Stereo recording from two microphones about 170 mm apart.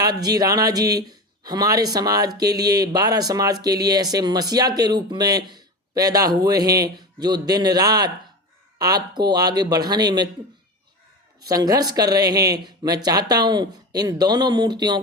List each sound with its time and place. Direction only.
0.0 s a man's voice: 20° right (ahead or behind)
11.3 s speech: 20° right (ahead or behind)